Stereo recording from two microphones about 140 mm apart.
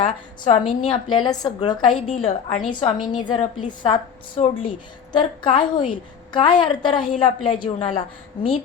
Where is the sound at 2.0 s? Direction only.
50° left (ahead or behind).